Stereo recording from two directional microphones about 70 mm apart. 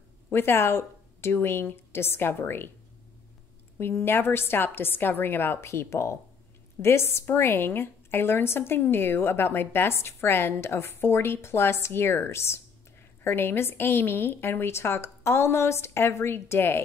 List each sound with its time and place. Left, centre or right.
0.3 s a woman's voice: left
3.7 s a woman's voice: left